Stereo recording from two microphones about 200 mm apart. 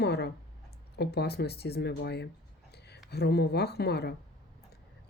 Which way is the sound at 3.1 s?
55° left (ahead or behind).